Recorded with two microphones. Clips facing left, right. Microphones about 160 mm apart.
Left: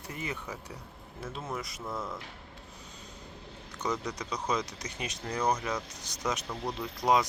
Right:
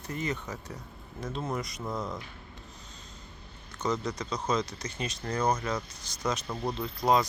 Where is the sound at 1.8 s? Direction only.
15° right (ahead or behind).